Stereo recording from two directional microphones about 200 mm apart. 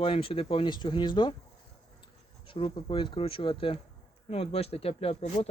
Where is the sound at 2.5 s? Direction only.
25° left (ahead or behind).